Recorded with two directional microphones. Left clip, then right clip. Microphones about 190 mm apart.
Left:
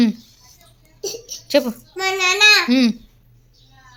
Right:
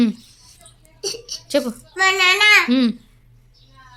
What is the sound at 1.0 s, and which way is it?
Child singing, 5° right (ahead or behind).